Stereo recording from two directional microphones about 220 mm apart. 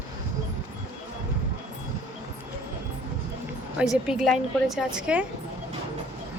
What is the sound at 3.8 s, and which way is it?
A woman's voice, 5° right (ahead or behind).